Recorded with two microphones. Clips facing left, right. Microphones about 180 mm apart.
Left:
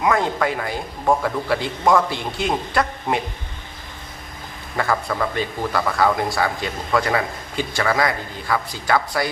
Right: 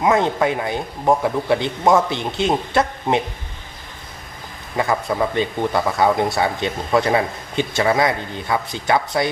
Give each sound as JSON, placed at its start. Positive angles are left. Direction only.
{"t": 0.0, "sound": "speech", "side_deg": -20}
{"t": 4.8, "sound": "speech", "side_deg": -20}